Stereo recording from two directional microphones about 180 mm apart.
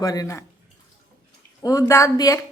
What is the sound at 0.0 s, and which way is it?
Speech, 20° left (ahead or behind).